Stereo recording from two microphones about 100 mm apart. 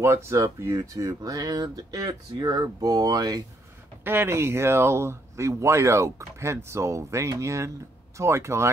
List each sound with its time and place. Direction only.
0.0 s speech: 25° right (ahead or behind)
4.0 s speech: 20° right (ahead or behind)